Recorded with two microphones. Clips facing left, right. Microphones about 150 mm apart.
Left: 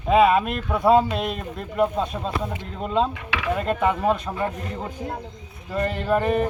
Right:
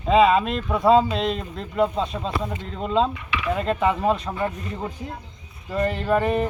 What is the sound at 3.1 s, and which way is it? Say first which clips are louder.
Speech: even; 90° left.